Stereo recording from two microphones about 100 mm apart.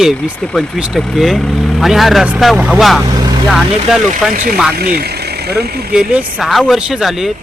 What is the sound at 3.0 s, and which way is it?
Vehicle, 40° right (ahead or behind).